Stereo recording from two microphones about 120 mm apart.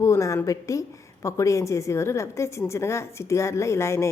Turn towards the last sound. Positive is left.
turn(degrees=25)  # may be behind; listen again after turning